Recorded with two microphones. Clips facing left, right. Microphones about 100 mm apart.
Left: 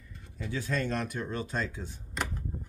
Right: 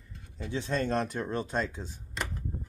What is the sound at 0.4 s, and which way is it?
Speech, 25° right (ahead or behind).